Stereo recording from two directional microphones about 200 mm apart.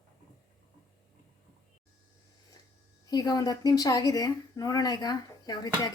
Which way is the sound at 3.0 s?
20° left (ahead or behind).